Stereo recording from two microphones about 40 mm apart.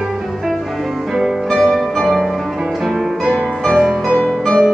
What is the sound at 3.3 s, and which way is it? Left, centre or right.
Music, left.